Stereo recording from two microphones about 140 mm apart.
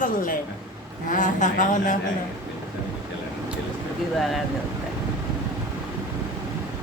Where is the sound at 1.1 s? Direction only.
65° left (ahead or behind).